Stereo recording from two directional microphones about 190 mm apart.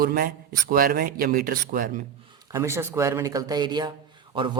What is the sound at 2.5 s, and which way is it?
Speech, 15° right (ahead or behind).